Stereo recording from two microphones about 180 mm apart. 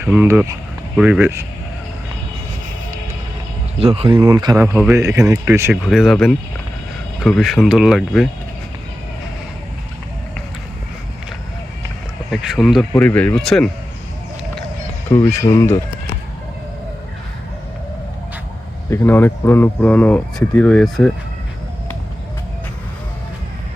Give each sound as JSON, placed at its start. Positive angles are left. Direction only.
{"t": 0.0, "sound": "speech", "side_deg": -10}
{"t": 3.8, "sound": "speech", "side_deg": -35}
{"t": 4.2, "sound": "speech", "side_deg": -20}
{"t": 5.7, "sound": "speech", "side_deg": 0}
{"t": 12.3, "sound": "speech", "side_deg": 0}
{"t": 15.1, "sound": "speech", "side_deg": 20}
{"t": 18.9, "sound": "speech", "side_deg": 15}